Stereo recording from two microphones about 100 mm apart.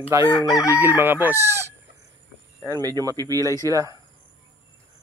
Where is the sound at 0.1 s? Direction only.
35° right (ahead or behind).